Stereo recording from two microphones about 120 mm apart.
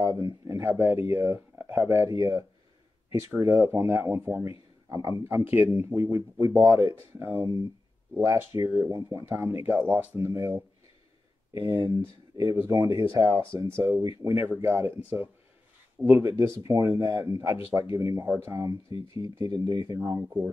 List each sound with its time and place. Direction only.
0.0 s speech: 30° right (ahead or behind)
6.4 s speech: 30° right (ahead or behind)
7.2 s speech: 20° right (ahead or behind); by 20.0 s 35° right (ahead or behind)